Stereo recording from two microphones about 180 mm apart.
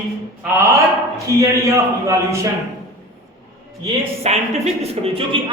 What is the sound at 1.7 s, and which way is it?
Speech, 15° right (ahead or behind).